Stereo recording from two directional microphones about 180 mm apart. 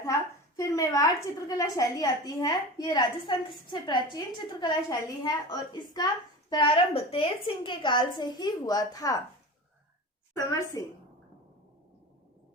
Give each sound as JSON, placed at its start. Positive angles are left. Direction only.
{"t": 0.1, "sound": "a woman's voice", "side_deg": 20}
{"t": 10.3, "sound": "a woman's voice", "side_deg": 20}